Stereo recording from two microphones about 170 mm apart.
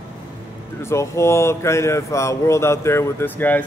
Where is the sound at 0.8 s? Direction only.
15° left (ahead or behind).